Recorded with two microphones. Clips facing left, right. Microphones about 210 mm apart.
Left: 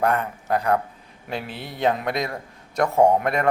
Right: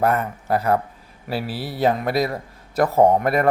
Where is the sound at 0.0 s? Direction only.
5° right (ahead or behind).